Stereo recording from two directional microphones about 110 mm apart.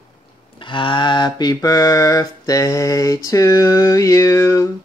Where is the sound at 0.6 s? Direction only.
50° left (ahead or behind); by 4.6 s 25° left (ahead or behind).